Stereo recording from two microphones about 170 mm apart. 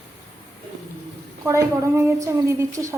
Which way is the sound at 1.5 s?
20° right (ahead or behind).